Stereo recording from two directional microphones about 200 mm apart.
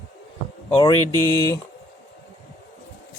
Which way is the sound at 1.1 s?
20° right (ahead or behind).